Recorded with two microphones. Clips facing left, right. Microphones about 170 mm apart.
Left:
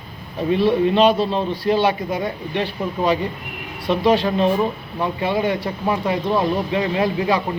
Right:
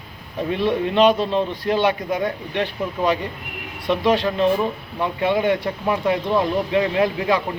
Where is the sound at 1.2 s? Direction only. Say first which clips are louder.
Left 1 dB; 10° left (ahead or behind).